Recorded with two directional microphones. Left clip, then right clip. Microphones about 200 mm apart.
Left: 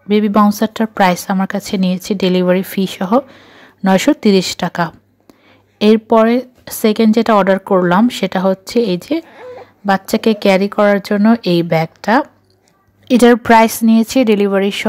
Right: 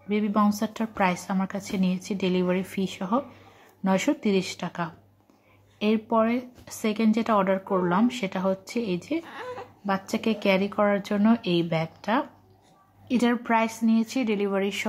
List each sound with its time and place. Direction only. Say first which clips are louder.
0.1 s speech: left 13 dB; 40° left (ahead or behind)